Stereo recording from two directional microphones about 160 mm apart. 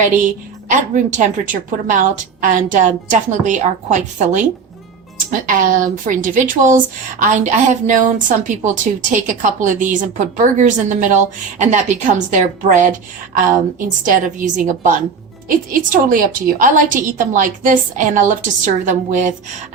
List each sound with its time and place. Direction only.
0.7 s a woman's voice: 55° right (ahead or behind)